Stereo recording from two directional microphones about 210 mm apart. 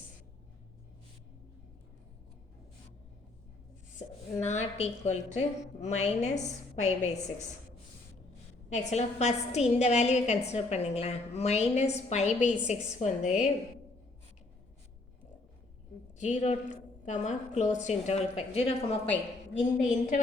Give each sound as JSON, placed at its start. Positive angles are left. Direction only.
{"t": 3.9, "sound": "a woman's voice", "side_deg": 35}
{"t": 8.7, "sound": "a woman's voice", "side_deg": 35}
{"t": 16.1, "sound": "a woman's voice", "side_deg": 35}